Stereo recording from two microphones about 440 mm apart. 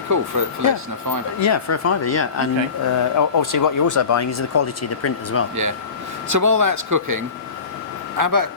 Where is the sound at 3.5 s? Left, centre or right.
Left.